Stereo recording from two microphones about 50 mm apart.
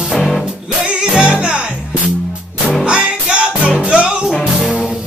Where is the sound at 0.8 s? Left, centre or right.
Centre.